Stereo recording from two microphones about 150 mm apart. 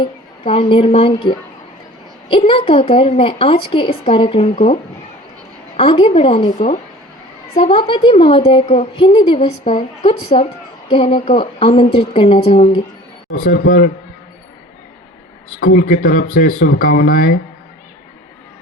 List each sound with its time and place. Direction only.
0.0 s a woman's voice: 40° left (ahead or behind)
7.5 s a woman's voice: 40° left (ahead or behind)
13.4 s speech: 80° left; by 13.9 s 65° left (ahead or behind)
15.6 s speech: 75° left (ahead or behind)